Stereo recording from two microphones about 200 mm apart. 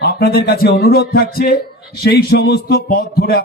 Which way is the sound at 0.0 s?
50° left (ahead or behind).